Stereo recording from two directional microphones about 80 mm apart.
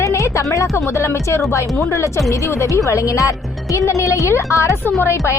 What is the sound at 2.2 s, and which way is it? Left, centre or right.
Speech, left.